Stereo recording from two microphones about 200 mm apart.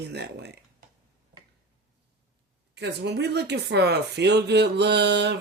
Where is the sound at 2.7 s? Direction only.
60° right (ahead or behind).